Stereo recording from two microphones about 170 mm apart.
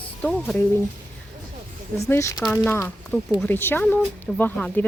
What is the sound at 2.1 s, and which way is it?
Speech, 15° left (ahead or behind).